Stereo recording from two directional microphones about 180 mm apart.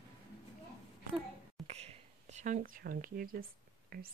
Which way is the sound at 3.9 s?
55° right (ahead or behind).